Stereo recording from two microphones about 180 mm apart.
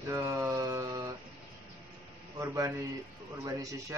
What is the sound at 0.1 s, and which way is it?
Mantra, 15° right (ahead or behind).